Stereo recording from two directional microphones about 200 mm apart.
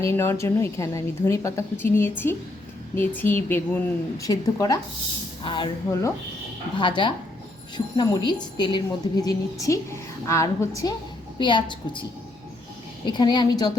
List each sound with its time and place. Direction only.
0.0 s a woman's voice: 15° left (ahead or behind)
13.1 s a woman's voice: 20° left (ahead or behind)